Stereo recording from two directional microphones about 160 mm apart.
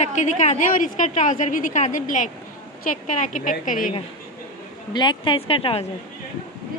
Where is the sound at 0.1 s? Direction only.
45° left (ahead or behind).